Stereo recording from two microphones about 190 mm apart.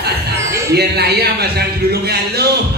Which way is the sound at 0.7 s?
55° right (ahead or behind).